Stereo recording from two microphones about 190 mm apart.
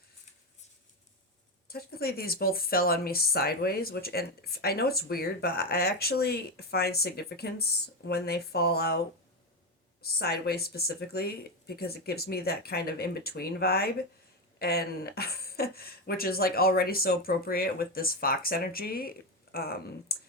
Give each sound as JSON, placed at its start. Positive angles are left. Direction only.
{"t": 1.6, "sound": "speech", "side_deg": 55}
{"t": 10.1, "sound": "speech", "side_deg": 55}